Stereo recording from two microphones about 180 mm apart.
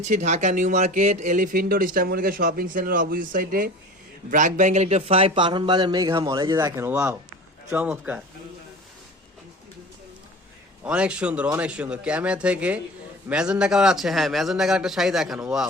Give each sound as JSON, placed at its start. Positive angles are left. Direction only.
{"t": 0.0, "sound": "a man's voice", "side_deg": -40}
{"t": 10.8, "sound": "a man's voice", "side_deg": -5}